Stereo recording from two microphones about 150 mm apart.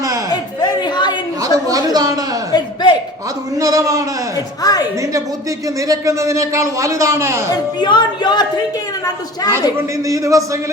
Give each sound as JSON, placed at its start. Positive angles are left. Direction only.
{"t": 0.3, "sound": "a sound", "side_deg": 30}
{"t": 1.4, "sound": "a woman's voice", "side_deg": -25}
{"t": 2.5, "sound": "a sound", "side_deg": 30}
{"t": 3.6, "sound": "speech", "side_deg": -20}
{"t": 4.4, "sound": "a woman's voice", "side_deg": 25}
{"t": 4.9, "sound": "speech", "side_deg": -20}
{"t": 7.5, "sound": "a woman's voice", "side_deg": 30}
{"t": 9.7, "sound": "speech", "side_deg": -20}